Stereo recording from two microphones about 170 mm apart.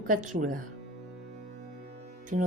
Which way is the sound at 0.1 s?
50° right (ahead or behind).